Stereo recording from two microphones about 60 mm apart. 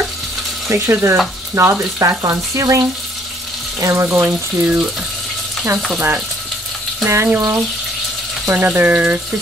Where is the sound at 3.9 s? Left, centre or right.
Right.